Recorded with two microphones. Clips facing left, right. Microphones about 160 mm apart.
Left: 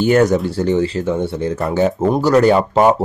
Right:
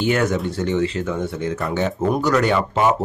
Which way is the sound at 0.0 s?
40° left (ahead or behind).